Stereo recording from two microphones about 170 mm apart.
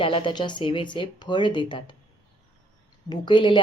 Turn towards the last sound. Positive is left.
turn(degrees=30)  # may be behind; listen again after turning